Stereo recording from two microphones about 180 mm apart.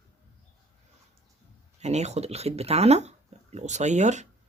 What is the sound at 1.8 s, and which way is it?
Speech, 40° right (ahead or behind).